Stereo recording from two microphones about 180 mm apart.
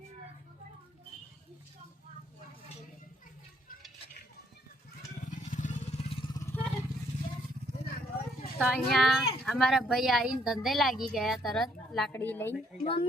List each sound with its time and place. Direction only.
5.3 s vehicle: 45° left (ahead or behind)
6.4 s vehicle: 10° left (ahead or behind)
8.5 s a woman's voice: centre (ahead or behind)
12.8 s a woman's voice: 30° left (ahead or behind)